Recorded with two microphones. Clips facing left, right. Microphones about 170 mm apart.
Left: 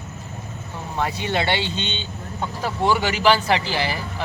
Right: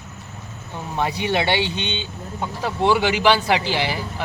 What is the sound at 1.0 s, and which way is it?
Speech, 15° right (ahead or behind).